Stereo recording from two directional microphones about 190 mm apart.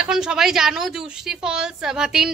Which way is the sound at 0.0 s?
5° right (ahead or behind).